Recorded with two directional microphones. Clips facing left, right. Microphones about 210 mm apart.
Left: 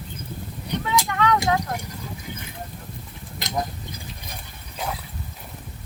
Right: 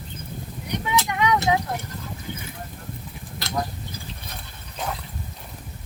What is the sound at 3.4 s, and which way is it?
Tick-tock, 20° left (ahead or behind).